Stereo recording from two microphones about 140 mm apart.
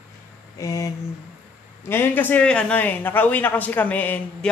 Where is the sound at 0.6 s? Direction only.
25° left (ahead or behind).